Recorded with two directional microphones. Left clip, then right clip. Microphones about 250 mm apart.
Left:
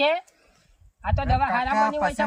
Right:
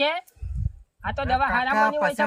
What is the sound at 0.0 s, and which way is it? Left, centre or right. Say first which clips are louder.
A man's voice: left 2 dB; centre.